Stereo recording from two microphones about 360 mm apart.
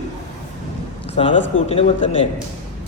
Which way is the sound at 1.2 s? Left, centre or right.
Centre.